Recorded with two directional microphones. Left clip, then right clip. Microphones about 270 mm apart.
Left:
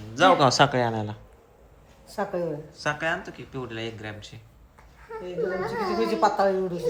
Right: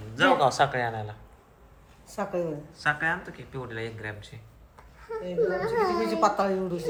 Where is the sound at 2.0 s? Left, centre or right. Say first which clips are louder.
Left 2 dB; centre.